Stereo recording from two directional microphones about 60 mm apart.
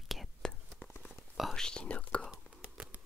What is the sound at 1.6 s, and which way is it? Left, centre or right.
Whispering, centre.